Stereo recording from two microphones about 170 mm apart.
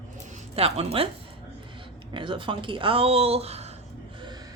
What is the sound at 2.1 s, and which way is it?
Speech, 30° right (ahead or behind).